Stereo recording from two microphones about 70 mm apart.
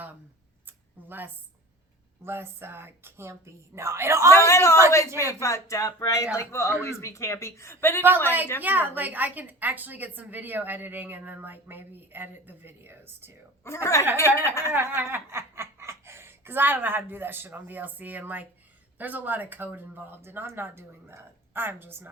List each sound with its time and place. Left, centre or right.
1.0 s speech: right
4.4 s a woman's voice: left
8.6 s a woman's voice: right
13.7 s a woman's voice: left
14.7 s speech: right